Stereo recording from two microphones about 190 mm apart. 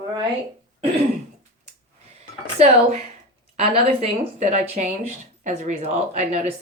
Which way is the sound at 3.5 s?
30° right (ahead or behind).